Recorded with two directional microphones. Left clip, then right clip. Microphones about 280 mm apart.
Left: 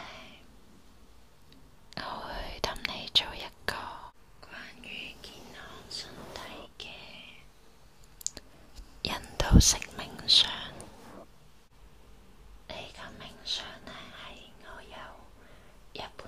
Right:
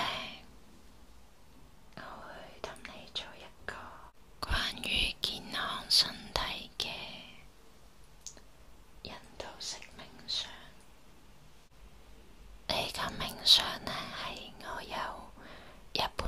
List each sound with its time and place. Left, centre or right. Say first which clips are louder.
0.0 s throat clearing: right 10 dB; right
2.0 s whispering: left 9 dB; left
4.4 s whispering: right 12 dB; right
9.0 s whispering: left 12 dB; left
12.6 s whispering: right 9 dB; right